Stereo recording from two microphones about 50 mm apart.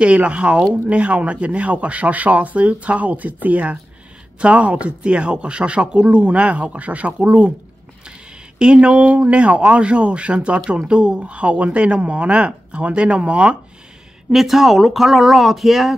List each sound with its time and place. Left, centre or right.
0.0 s speech: right
8.5 s speech: centre
14.3 s speech: centre